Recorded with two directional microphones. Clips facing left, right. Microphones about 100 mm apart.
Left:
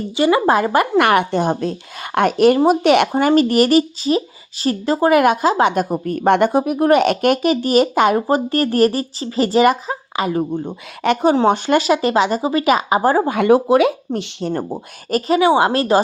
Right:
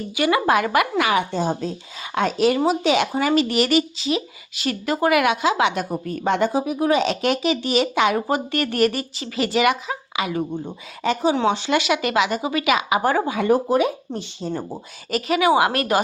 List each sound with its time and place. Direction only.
0.2 s speech: 25° left (ahead or behind)
0.9 s speech: 60° left (ahead or behind)
11.4 s speech: 50° left (ahead or behind); by 13.2 s 35° left (ahead or behind)
13.2 s speech: 70° left (ahead or behind); by 15.2 s 55° left (ahead or behind)
15.3 s speech: 30° left (ahead or behind)